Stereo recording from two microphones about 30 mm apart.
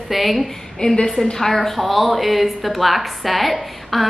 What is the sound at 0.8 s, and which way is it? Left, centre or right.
Speech, left.